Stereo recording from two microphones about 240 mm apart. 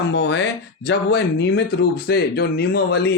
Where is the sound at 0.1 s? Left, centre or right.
Left.